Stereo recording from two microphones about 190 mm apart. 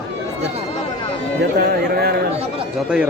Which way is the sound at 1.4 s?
55° right (ahead or behind).